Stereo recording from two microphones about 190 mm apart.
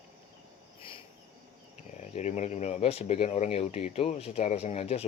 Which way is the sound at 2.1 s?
35° left (ahead or behind).